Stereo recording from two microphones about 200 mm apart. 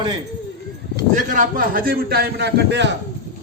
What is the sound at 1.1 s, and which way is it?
A man's voice, 40° right (ahead or behind).